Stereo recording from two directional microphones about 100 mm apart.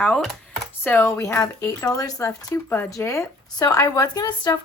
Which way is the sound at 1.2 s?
30° left (ahead or behind).